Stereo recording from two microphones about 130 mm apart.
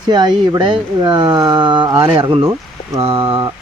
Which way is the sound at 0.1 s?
35° right (ahead or behind).